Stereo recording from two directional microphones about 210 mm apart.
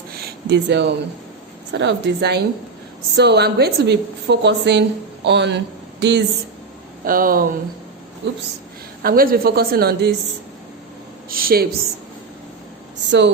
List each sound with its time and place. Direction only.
0.2 s a sound: 50° right (ahead or behind)
1.7 s a woman's voice: 55° right (ahead or behind)
7.0 s a woman's voice: 45° right (ahead or behind)
8.2 s a woman's voice: 55° right (ahead or behind)
9.0 s a woman's voice: 45° right (ahead or behind)
11.3 s a sound: 45° right (ahead or behind)
13.1 s speech: 60° right (ahead or behind)